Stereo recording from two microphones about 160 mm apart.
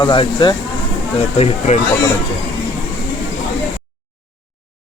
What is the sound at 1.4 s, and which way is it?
Speech, 45° left (ahead or behind).